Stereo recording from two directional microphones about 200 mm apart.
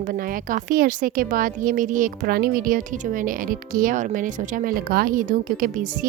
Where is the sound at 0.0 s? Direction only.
45° right (ahead or behind).